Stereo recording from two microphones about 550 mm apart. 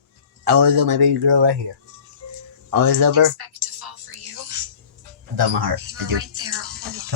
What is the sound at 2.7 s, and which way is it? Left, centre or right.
Music, right.